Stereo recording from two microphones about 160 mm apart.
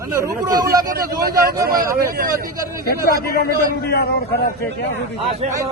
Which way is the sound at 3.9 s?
80° left.